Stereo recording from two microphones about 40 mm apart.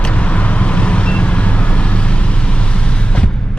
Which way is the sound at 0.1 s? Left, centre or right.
Left.